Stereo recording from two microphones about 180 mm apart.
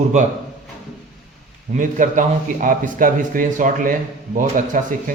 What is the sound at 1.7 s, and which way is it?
A man's voice, 45° right (ahead or behind).